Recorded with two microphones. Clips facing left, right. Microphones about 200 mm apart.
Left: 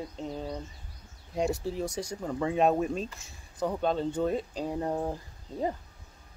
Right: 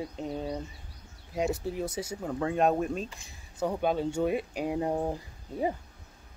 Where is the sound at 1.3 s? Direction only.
Centre (ahead or behind).